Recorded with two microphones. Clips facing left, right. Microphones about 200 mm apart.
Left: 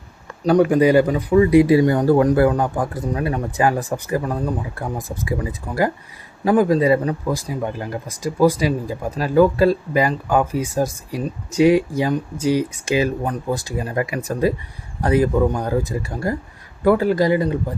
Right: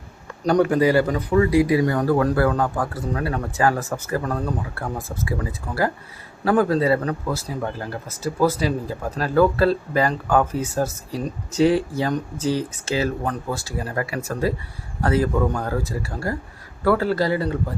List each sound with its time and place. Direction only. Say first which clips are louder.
0.4 s speech: left 3 dB; 10° left (ahead or behind)